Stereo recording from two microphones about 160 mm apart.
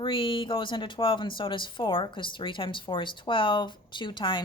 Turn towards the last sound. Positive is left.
turn(degrees=30)  # may be behind; listen again after turning